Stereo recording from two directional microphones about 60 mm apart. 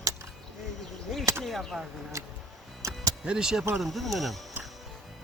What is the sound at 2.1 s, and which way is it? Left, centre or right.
Speech, right.